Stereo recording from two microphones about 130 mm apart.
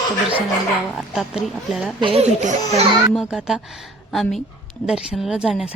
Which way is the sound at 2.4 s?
70° right (ahead or behind).